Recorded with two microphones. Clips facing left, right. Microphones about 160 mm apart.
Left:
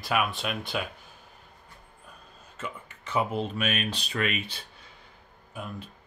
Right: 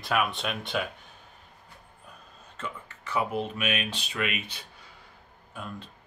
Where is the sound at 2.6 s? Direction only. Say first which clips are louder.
Even; 20° left (ahead or behind).